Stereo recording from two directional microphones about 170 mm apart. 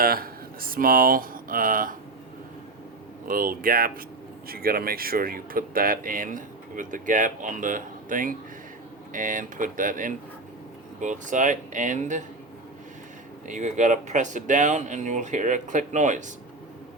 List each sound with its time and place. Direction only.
0.0 s speech: 60° right (ahead or behind)
3.2 s speech: 55° right (ahead or behind)
13.5 s speech: 45° right (ahead or behind)